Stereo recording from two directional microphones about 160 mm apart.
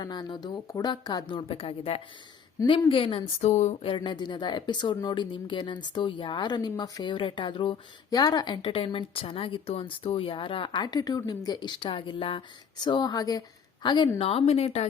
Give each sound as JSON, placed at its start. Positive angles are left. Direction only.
{"t": 0.0, "sound": "speech", "side_deg": 25}
{"t": 3.5, "sound": "speech", "side_deg": 45}
{"t": 3.9, "sound": "speech", "side_deg": 30}